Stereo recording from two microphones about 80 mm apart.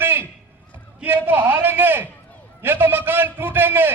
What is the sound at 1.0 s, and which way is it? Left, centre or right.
A man's voice, right.